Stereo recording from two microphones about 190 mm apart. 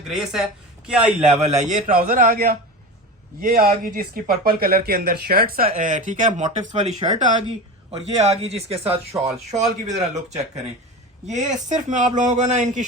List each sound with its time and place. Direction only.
0.1 s a man's voice: centre (ahead or behind)
1.4 s a man's voice: 35° right (ahead or behind)